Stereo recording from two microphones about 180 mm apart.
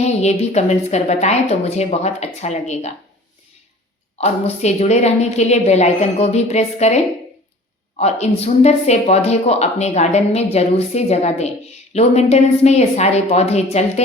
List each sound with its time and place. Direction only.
0.0 s speech: 35° left (ahead or behind)
4.2 s speech: 35° left (ahead or behind)